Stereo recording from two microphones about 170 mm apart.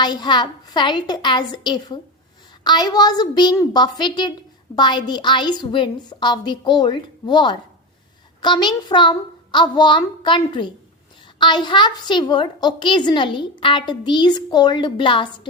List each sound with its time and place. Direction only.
0.0 s a woman's voice: 25° left (ahead or behind)